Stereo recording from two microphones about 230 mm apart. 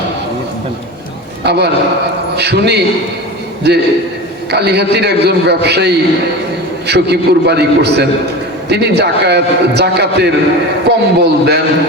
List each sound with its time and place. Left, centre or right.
1.5 s a man's voice: right